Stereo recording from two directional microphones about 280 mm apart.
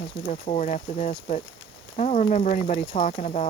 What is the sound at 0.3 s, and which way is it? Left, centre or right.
Speech, left.